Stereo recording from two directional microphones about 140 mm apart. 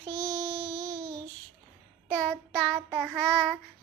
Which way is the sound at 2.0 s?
10° left (ahead or behind).